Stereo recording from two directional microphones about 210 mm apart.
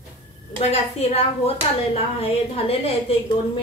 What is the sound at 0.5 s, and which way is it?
A woman's voice, 30° left (ahead or behind).